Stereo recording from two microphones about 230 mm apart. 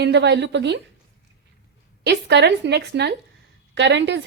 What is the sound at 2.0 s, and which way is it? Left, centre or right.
A woman's voice, right.